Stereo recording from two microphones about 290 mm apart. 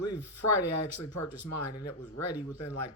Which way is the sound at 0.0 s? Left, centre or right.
Left.